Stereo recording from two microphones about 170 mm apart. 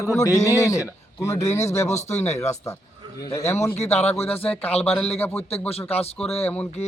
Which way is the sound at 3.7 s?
40° left (ahead or behind).